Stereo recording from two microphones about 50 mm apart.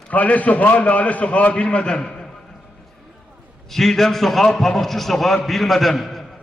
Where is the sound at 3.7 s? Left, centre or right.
Centre.